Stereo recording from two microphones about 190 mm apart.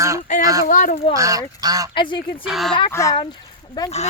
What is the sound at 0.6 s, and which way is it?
Speech, 45° left (ahead or behind).